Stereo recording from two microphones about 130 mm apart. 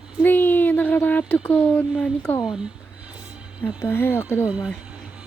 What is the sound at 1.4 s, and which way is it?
Speech, 15° left (ahead or behind).